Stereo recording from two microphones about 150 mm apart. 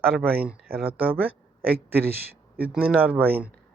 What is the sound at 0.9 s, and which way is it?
Speech, 10° right (ahead or behind).